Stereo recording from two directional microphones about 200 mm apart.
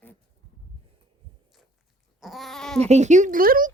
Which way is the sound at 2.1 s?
Centre (ahead or behind).